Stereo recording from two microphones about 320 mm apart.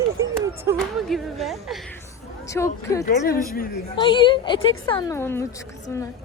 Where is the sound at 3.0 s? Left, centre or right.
Left.